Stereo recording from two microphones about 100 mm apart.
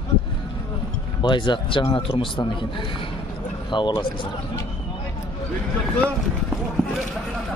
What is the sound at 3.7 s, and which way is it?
Speech, 50° left (ahead or behind).